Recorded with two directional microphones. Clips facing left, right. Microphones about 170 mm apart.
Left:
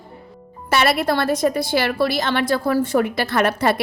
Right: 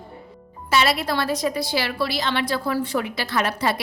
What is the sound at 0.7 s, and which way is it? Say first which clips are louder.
A woman's voice: left 3 dB; 55° left (ahead or behind).